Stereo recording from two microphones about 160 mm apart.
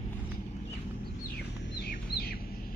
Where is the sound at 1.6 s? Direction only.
80° left.